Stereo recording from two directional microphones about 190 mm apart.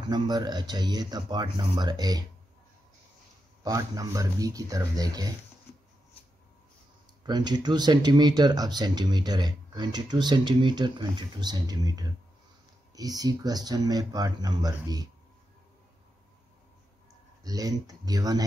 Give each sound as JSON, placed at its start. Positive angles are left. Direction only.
{"t": 0.1, "sound": "speech", "side_deg": -20}
{"t": 3.6, "sound": "speech", "side_deg": -20}
{"t": 7.2, "sound": "speech", "side_deg": -20}
{"t": 17.4, "sound": "speech", "side_deg": -20}